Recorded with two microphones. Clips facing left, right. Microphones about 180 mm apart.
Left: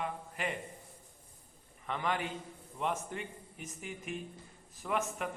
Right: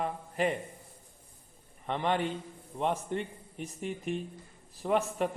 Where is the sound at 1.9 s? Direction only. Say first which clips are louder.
Right 5 dB; 35° right (ahead or behind).